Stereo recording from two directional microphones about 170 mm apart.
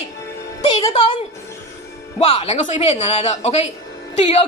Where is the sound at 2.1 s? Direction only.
35° left (ahead or behind).